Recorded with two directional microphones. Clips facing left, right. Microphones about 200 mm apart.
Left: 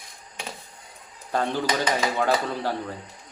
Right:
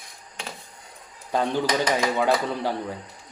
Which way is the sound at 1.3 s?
15° right (ahead or behind).